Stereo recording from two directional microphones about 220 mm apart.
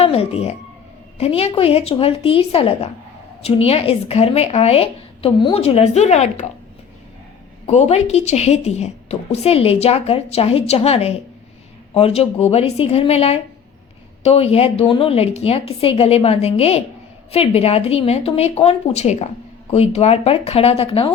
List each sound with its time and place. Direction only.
0.0 s a woman's voice: 25° left (ahead or behind)
7.7 s a woman's voice: 30° left (ahead or behind)